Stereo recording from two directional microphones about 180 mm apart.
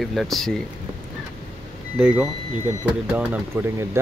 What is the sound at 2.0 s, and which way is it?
Speech, 5° right (ahead or behind).